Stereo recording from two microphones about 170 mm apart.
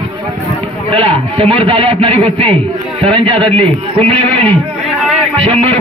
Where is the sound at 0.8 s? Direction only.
35° right (ahead or behind).